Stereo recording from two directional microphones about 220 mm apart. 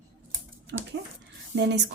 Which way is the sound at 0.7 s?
55° right (ahead or behind).